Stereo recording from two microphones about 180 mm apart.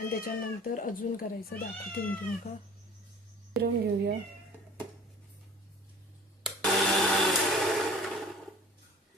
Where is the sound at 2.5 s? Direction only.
40° left (ahead or behind).